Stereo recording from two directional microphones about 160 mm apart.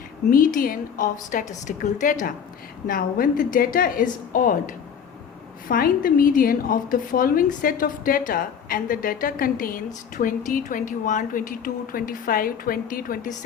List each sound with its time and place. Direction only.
0.3 s a woman's voice: 60° left (ahead or behind)